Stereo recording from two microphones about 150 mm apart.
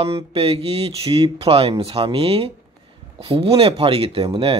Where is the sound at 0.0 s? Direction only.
40° right (ahead or behind).